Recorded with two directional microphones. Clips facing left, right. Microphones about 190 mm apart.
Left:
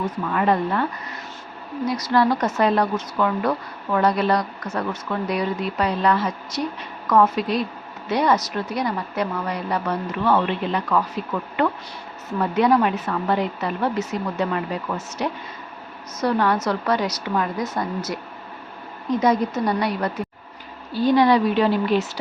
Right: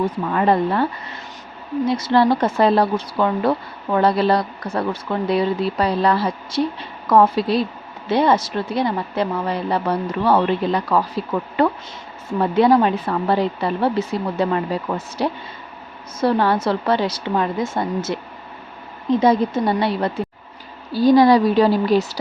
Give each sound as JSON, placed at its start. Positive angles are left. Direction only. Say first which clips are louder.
{"t": 0.0, "sound": "speech", "louder": "right 3 dB", "side_deg": -30}